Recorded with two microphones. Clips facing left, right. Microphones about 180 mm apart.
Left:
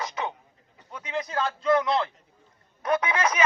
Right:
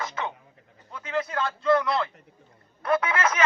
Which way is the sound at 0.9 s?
15° left (ahead or behind).